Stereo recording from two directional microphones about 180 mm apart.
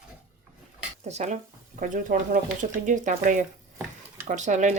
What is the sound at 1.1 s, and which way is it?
Speech, 40° right (ahead or behind).